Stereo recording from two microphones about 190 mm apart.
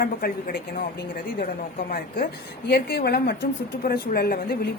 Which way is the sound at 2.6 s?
55° left (ahead or behind).